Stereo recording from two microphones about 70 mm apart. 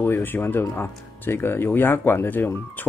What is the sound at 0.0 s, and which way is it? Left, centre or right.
Speech, left.